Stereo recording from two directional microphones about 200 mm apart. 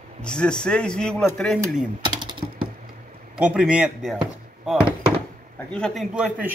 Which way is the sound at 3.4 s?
5° right (ahead or behind).